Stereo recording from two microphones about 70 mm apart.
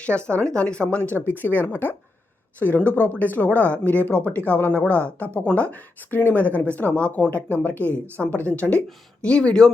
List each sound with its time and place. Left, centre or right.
0.0 s speech: centre
1.1 s speech: left; by 9.6 s centre